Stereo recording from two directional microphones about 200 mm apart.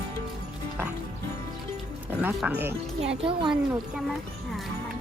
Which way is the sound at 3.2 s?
25° right (ahead or behind).